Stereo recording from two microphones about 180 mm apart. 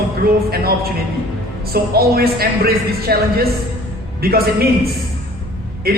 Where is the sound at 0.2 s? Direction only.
55° right (ahead or behind).